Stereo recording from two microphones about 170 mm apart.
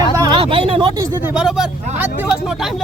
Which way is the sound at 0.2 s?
30° right (ahead or behind).